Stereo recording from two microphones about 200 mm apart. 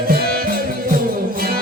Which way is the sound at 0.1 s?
50° right (ahead or behind).